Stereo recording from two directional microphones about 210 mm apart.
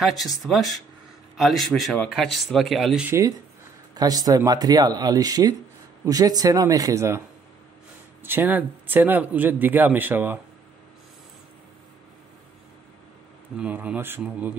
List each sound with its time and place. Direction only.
0.0 s speech: centre (ahead or behind)
13.6 s speech: 5° right (ahead or behind)